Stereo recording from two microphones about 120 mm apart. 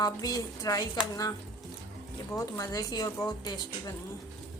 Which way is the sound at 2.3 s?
30° left (ahead or behind).